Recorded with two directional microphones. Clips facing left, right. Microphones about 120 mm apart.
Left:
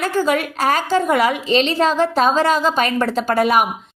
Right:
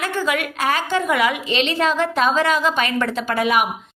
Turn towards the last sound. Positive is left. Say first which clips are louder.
# left 3 dB
turn(degrees=40)  # may be behind; listen again after turning